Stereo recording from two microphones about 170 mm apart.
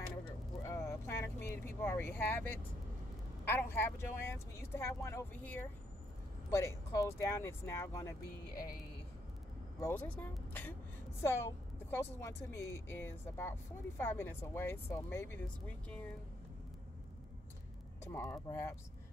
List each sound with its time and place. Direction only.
0.6 s vehicle: 15° left (ahead or behind)
3.4 s a woman's voice: 15° left (ahead or behind)
9.8 s a woman's voice: 15° left (ahead or behind)
18.0 s a woman's voice: 15° left (ahead or behind)